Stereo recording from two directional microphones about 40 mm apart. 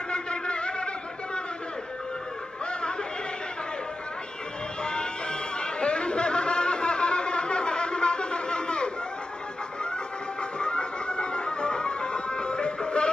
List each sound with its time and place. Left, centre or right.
0.1 s a sound: left
4.8 s chatter: left
10.6 s music: left